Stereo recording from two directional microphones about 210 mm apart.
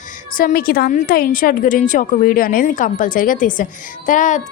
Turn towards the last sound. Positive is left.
turn(degrees=35)  # may be behind; listen again after turning